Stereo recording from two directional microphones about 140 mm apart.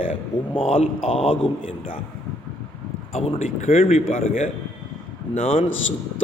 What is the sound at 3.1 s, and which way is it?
Speech, 55° left (ahead or behind).